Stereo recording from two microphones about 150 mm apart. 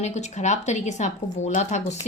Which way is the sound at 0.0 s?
50° left (ahead or behind).